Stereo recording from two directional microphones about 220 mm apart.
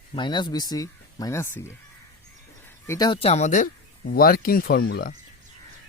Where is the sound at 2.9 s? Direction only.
20° left (ahead or behind); by 5.1 s 45° left (ahead or behind).